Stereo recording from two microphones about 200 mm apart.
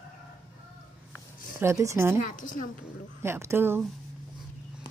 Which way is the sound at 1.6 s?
15° right (ahead or behind).